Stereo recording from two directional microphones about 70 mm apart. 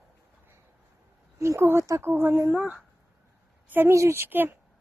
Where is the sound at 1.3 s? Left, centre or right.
Right.